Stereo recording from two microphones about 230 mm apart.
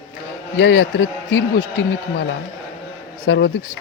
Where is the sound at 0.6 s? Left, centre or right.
Left.